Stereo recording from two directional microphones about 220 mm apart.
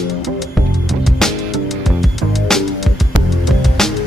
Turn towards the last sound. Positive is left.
turn(degrees=0)  # may be behind; listen again after turning